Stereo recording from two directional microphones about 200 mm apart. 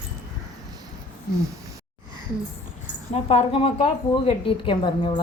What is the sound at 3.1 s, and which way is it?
A woman's voice, 30° left (ahead or behind).